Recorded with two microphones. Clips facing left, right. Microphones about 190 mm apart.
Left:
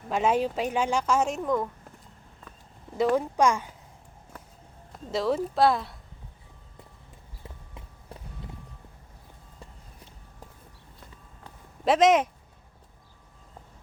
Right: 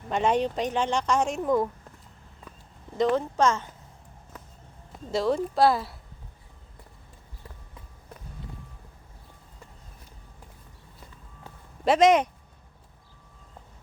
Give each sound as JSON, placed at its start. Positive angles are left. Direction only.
{"t": 0.1, "sound": "a woman's voice", "side_deg": 5}
{"t": 1.4, "sound": "speech", "side_deg": -10}
{"t": 3.0, "sound": "speech", "side_deg": 10}
{"t": 4.9, "sound": "a woman's voice", "side_deg": 0}
{"t": 7.4, "sound": "run", "side_deg": 25}
{"t": 11.9, "sound": "a woman's voice", "side_deg": 0}